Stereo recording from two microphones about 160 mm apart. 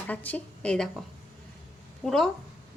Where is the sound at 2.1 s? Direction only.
5° left (ahead or behind).